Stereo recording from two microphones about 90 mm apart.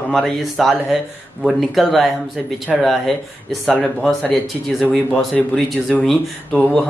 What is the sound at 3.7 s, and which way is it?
Speech, 15° left (ahead or behind).